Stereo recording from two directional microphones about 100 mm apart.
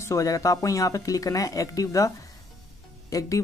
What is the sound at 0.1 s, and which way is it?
Speech, 35° left (ahead or behind).